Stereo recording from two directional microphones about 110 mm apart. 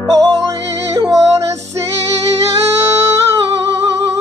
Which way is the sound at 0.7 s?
30° right (ahead or behind).